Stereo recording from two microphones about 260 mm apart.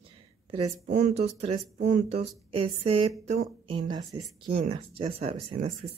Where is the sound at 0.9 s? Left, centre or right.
Right.